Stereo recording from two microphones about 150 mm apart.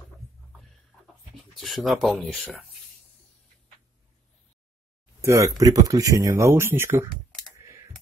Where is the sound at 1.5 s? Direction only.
Centre (ahead or behind).